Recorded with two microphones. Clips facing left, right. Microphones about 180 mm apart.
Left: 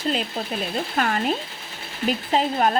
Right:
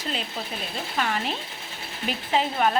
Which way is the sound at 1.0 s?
50° left (ahead or behind).